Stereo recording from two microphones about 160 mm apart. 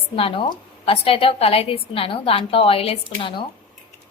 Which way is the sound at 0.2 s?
35° left (ahead or behind).